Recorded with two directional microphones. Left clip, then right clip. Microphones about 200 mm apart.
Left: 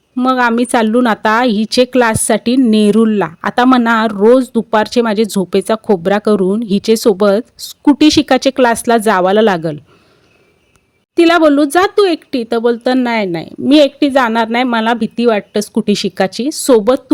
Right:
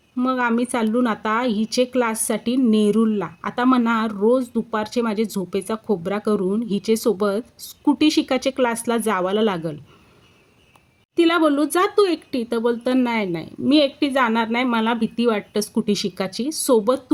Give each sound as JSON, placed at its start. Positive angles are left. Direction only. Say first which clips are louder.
{"t": 0.2, "sound": "a woman's voice", "louder": "left 9 dB", "side_deg": 40}
{"t": 11.1, "sound": "a woman's voice", "louder": "left 9 dB", "side_deg": 40}